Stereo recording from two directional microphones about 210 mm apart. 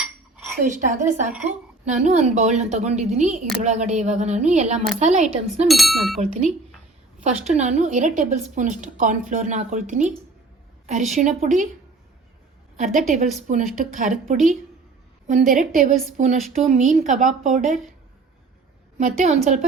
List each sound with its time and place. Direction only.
0.7 s a woman's voice: 35° right (ahead or behind)
5.6 s a sound: centre (ahead or behind)
7.3 s a woman's voice: 35° right (ahead or behind)
12.7 s a woman's voice: 35° right (ahead or behind)
18.9 s a woman's voice: 35° right (ahead or behind)